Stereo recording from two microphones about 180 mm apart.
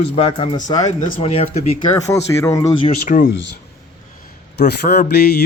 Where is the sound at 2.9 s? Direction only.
50° left (ahead or behind).